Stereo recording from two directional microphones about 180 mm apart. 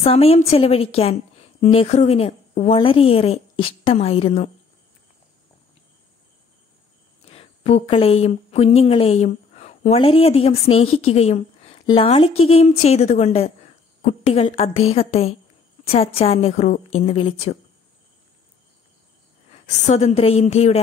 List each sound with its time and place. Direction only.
0.0 s a woman's voice: 35° left (ahead or behind)
7.2 s a woman's voice: 35° left (ahead or behind)
19.6 s a woman's voice: 40° left (ahead or behind)